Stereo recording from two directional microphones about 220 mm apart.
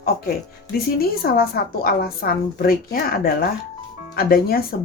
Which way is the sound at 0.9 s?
45° left (ahead or behind).